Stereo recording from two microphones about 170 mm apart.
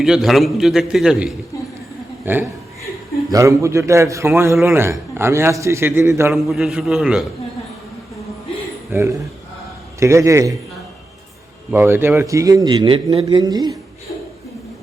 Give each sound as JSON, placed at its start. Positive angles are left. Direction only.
{"t": 0.0, "sound": "a man's voice", "side_deg": 0}
{"t": 6.3, "sound": "a man's voice", "side_deg": 0}
{"t": 8.9, "sound": "a man's voice", "side_deg": -15}
{"t": 11.7, "sound": "a man's voice", "side_deg": -15}